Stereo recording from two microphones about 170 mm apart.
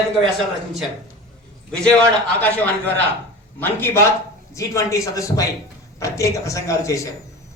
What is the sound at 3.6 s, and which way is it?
A man's voice, 15° left (ahead or behind).